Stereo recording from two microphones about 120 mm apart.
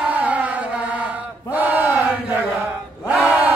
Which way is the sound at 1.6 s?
15° right (ahead or behind).